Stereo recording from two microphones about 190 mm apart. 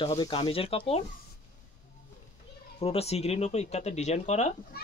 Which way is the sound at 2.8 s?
30° left (ahead or behind).